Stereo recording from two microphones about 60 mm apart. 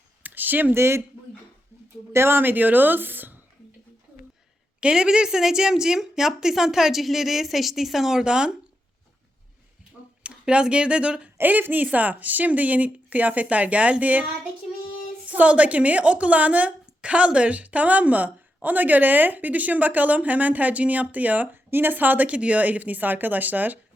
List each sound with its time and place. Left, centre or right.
0.2 s a sound: right
0.7 s speech: right
2.1 s speech: right
4.8 s a woman's voice: centre
10.2 s speech: centre
11.3 s a woman's voice: right
15.3 s a woman's voice: right